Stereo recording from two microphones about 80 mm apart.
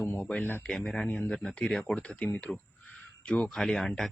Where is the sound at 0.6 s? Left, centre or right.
Centre.